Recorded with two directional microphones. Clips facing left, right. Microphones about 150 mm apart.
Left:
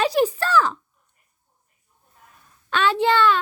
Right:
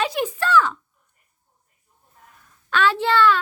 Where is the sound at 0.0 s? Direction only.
35° left (ahead or behind).